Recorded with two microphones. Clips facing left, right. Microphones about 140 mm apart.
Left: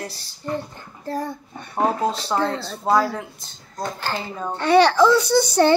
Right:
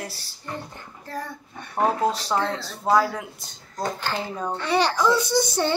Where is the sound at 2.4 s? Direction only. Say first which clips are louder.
Left 3 dB; 35° left (ahead or behind).